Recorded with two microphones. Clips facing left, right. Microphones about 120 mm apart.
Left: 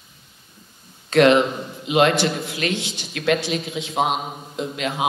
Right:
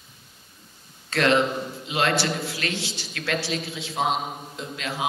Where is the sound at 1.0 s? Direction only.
20° left (ahead or behind).